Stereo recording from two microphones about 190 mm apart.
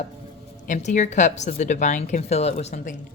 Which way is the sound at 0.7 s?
40° left (ahead or behind).